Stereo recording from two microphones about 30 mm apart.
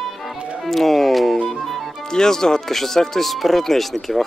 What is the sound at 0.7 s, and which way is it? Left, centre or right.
Music, centre.